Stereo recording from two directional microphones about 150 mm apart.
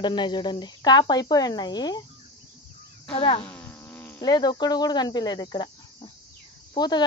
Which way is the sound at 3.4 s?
10° left (ahead or behind).